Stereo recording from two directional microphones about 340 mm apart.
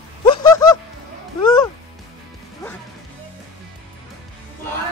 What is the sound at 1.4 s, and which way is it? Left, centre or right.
Music, centre.